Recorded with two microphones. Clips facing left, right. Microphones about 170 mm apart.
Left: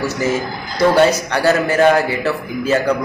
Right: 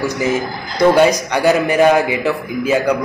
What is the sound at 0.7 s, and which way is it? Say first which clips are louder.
Speech: right 1 dB; 15° right (ahead or behind).